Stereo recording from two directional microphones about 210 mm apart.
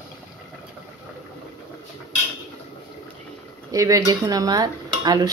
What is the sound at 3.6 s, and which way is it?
Dishes, 15° right (ahead or behind).